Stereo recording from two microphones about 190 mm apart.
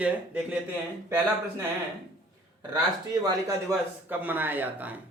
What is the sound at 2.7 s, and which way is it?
Speech, 20° right (ahead or behind).